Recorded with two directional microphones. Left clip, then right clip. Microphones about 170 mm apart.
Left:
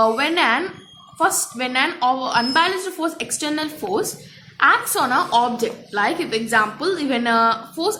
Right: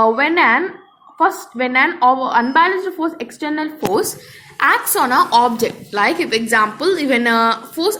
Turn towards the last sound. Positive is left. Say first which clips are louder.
# right 3 dB
turn(degrees=-15)  # may be behind; listen again after turning